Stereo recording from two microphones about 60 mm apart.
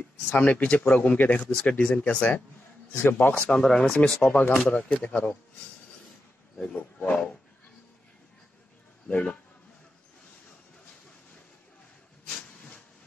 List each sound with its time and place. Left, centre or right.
0.3 s speech: left
1.4 s speech: centre
1.7 s speech: left
3.4 s speech: centre
6.6 s speech: centre
9.0 s a man's voice: centre